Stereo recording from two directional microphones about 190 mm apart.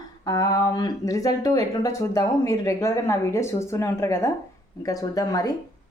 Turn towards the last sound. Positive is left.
turn(degrees=20)  # may be behind; listen again after turning